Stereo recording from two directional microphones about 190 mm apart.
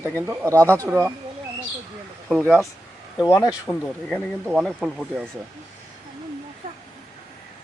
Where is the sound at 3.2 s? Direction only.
20° left (ahead or behind).